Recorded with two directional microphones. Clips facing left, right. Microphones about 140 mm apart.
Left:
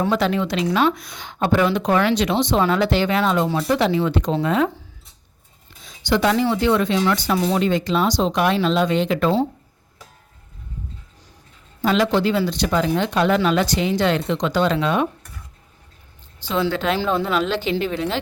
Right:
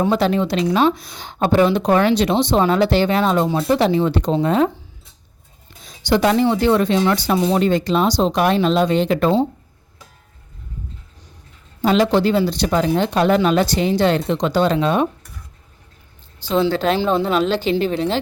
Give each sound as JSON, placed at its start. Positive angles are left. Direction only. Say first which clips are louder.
{"t": 0.1, "sound": "speech", "louder": "right 3 dB", "side_deg": -35}
{"t": 5.8, "sound": "a sound", "louder": "right 3 dB", "side_deg": -40}
{"t": 6.6, "sound": "speech", "louder": "right 3 dB", "side_deg": -35}
{"t": 11.8, "sound": "speech", "louder": "right 3 dB", "side_deg": -35}
{"t": 16.4, "sound": "speech", "louder": "right 4 dB", "side_deg": -30}